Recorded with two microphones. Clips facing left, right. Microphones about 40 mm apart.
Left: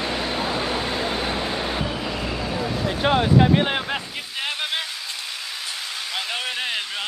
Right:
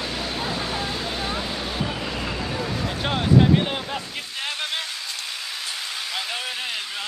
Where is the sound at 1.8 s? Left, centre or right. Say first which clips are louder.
Left 1 dB; centre.